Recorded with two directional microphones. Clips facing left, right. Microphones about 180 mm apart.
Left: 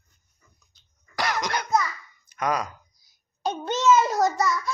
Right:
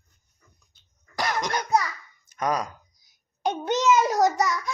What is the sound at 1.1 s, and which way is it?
Cough, 20° right (ahead or behind).